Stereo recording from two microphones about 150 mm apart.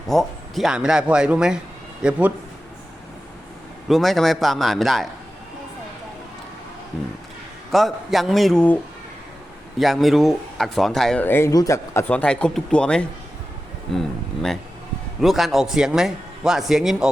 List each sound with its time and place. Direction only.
0.1 s a man's voice: centre (ahead or behind)
3.8 s speech: centre (ahead or behind)
6.9 s speech: centre (ahead or behind)
15.2 s speech: centre (ahead or behind)